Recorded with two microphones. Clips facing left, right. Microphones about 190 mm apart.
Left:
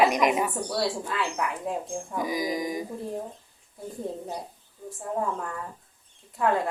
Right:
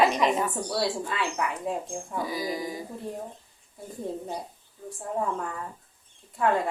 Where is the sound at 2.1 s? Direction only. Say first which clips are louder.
Left 2 dB; 15° left (ahead or behind).